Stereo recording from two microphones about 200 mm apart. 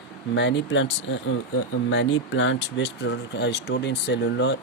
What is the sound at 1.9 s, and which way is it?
Speech, 85° left.